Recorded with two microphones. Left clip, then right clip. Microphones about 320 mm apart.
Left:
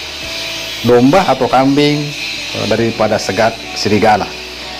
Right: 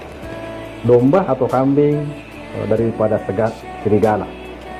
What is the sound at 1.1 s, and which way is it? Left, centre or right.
Speech, left.